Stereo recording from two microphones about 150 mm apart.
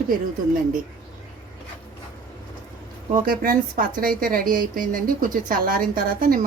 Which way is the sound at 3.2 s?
75° right (ahead or behind).